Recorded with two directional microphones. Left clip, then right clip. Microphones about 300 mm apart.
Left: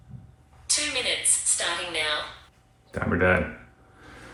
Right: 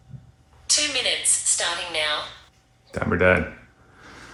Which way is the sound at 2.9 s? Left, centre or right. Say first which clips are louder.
Right 4 dB; right.